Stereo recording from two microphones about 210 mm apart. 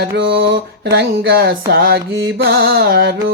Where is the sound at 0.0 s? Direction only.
55° right (ahead or behind).